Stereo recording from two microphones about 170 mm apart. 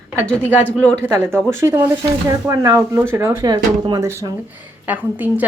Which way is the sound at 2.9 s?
15° right (ahead or behind).